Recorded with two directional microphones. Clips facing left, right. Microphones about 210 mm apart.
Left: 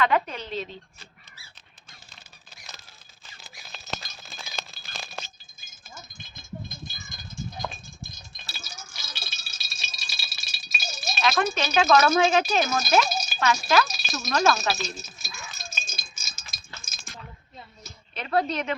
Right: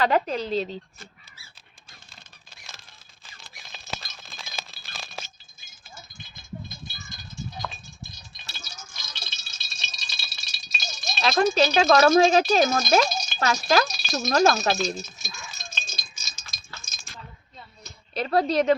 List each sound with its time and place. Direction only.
0.0 s speech: 35° right (ahead or behind)
3.7 s a sound: centre (ahead or behind)
6.7 s rattle: 50° left (ahead or behind)
8.4 s rattle: 10° left (ahead or behind)
11.2 s speech: 35° right (ahead or behind)
13.1 s a sound: 5° left (ahead or behind)
13.4 s speech: 40° right (ahead or behind)
13.9 s rattle: centre (ahead or behind)
14.3 s speech: 40° right (ahead or behind)
14.8 s a sound: 5° left (ahead or behind)
18.1 s speech: 35° right (ahead or behind)